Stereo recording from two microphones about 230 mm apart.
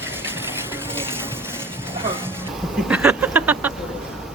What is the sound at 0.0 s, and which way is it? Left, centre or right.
Vehicle, centre.